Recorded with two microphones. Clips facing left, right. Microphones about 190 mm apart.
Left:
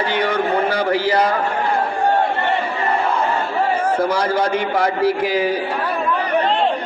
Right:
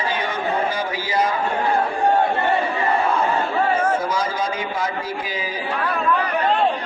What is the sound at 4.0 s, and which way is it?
A man's voice, 65° left (ahead or behind).